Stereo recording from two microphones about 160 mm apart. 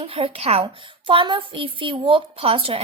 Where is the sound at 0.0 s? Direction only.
35° right (ahead or behind).